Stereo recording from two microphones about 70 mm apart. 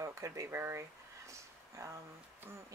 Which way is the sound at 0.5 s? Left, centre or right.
Right.